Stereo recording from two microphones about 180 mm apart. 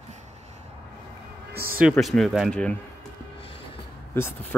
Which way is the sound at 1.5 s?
55° right (ahead or behind).